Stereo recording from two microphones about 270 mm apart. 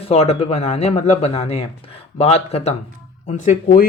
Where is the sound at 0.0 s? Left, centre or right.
Left.